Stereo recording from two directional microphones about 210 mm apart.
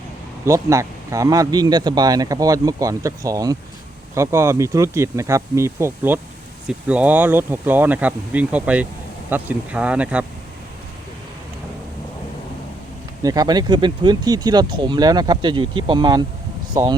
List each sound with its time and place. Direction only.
0.4 s a man's voice: 15° right (ahead or behind)
13.2 s speech: 20° right (ahead or behind)